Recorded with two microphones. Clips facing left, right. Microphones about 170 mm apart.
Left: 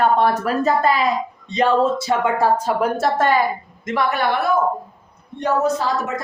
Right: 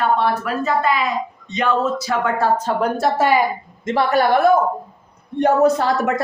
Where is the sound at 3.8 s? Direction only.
30° right (ahead or behind).